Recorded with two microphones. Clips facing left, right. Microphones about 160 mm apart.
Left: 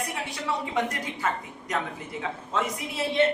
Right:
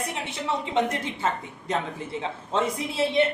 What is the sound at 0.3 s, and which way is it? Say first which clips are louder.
A man's voice: right 1 dB; 25° right (ahead or behind).